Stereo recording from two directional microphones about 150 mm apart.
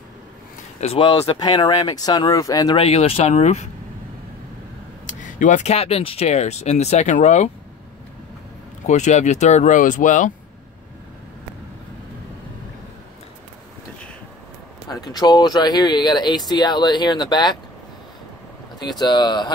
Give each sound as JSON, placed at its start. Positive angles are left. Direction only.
{"t": 0.7, "sound": "speech", "side_deg": 45}
{"t": 1.0, "sound": "speech", "side_deg": 30}
{"t": 2.8, "sound": "speech", "side_deg": 40}
{"t": 5.0, "sound": "speech", "side_deg": 60}
{"t": 8.8, "sound": "speech", "side_deg": 50}
{"t": 14.9, "sound": "speech", "side_deg": 25}
{"t": 18.8, "sound": "speech", "side_deg": 30}